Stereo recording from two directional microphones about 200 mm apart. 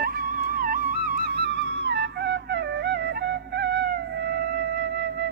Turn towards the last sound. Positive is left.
turn(degrees=-55)  # may be behind; listen again after turning